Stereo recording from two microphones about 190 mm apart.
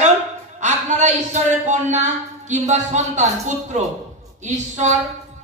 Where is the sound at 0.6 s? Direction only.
40° right (ahead or behind).